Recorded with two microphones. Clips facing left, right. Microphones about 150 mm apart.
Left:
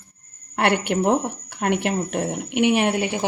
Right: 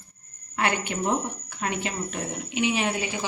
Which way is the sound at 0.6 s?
70° left (ahead or behind).